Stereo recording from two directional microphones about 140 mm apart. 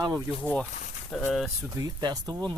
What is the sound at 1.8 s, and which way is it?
Speech, 30° right (ahead or behind).